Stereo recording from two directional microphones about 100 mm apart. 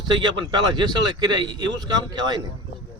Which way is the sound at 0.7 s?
45° right (ahead or behind).